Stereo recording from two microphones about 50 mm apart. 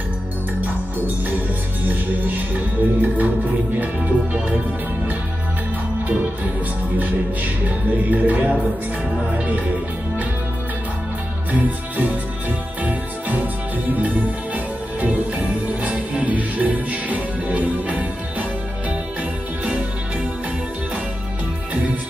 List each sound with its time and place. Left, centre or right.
1.9 s music: right
7.0 s music: right
11.5 s music: right